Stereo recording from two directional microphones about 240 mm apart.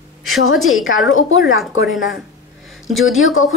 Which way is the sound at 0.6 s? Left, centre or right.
Centre.